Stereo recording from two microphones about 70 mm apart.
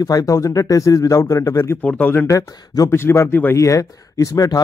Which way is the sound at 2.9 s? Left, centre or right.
Left.